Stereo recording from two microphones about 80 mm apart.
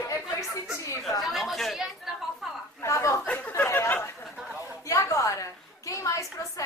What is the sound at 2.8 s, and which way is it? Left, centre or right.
Speech, left.